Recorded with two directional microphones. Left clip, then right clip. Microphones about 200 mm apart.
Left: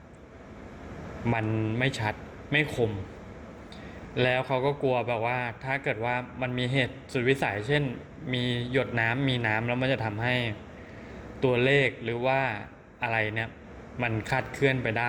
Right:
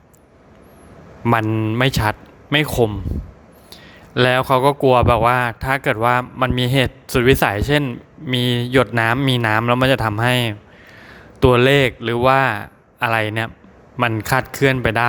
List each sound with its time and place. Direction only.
1.2 s speech: 50° right (ahead or behind)
4.1 s a man's voice: 50° right (ahead or behind)